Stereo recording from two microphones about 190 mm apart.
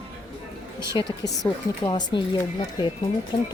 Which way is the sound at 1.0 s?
20° left (ahead or behind).